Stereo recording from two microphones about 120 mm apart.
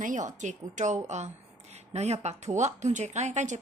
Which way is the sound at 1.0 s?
70° right (ahead or behind).